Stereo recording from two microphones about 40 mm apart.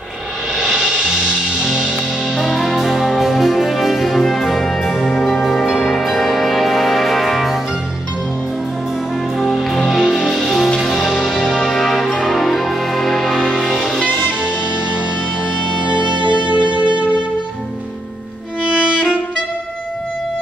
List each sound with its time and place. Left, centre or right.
0.6 s music: centre
9.4 s music: centre
14.0 s music: right
18.7 s violin: right